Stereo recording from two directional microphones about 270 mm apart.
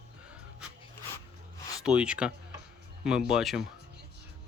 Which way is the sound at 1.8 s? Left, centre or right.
Centre.